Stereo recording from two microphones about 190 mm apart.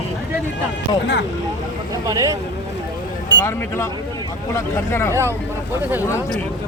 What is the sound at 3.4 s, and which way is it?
Speech, 15° left (ahead or behind).